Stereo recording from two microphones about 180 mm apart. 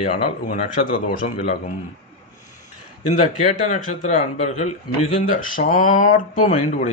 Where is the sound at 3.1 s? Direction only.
40° left (ahead or behind).